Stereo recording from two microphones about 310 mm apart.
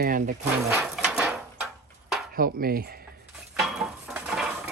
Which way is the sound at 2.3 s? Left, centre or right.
Right.